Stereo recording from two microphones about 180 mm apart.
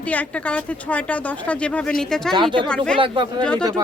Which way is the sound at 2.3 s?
25° right (ahead or behind).